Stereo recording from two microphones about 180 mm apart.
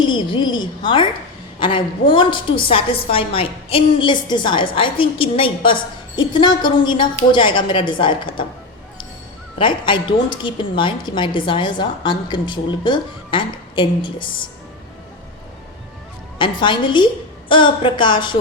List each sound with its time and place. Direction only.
0.0 s a woman's voice: 25° left (ahead or behind)
9.6 s a woman's voice: 25° left (ahead or behind)
16.4 s a woman's voice: 25° left (ahead or behind)